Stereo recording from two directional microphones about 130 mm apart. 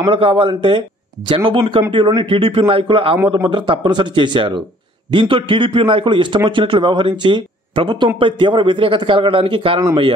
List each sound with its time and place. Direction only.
0.0 s speech: 40° right (ahead or behind)